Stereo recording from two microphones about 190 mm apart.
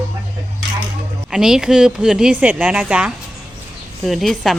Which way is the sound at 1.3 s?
5° right (ahead or behind).